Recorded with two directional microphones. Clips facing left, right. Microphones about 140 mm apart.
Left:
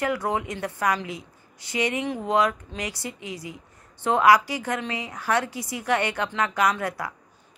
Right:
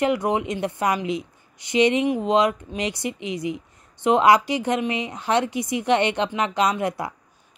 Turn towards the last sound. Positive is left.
turn(degrees=-20)  # may be behind; listen again after turning